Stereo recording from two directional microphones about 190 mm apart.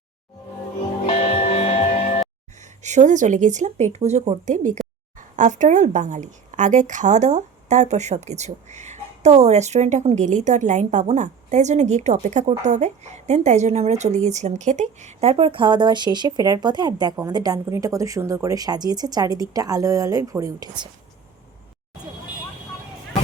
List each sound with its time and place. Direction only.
1.0 s music: 30° left (ahead or behind)
2.8 s a woman's voice: 40° right (ahead or behind); by 20.9 s 20° right (ahead or behind)